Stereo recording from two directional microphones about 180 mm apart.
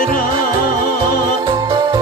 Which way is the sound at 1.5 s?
25° right (ahead or behind).